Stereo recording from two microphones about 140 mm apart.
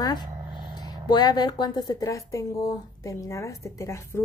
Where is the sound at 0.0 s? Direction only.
30° left (ahead or behind).